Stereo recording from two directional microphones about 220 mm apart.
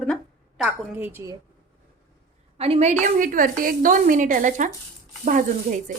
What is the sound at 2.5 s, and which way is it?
Speech, 25° right (ahead or behind).